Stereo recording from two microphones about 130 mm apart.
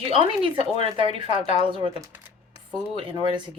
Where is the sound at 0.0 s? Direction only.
40° right (ahead or behind).